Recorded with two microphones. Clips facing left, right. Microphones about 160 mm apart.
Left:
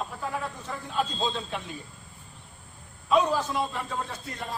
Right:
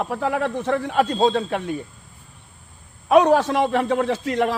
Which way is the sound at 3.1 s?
70° right (ahead or behind).